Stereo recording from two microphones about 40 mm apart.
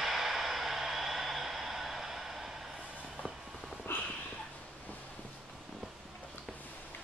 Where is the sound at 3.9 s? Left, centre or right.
Left.